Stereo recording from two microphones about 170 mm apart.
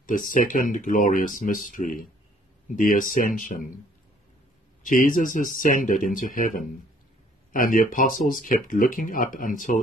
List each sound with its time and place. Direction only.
0.0 s speech: 50° left (ahead or behind)
4.8 s speech: 50° left (ahead or behind)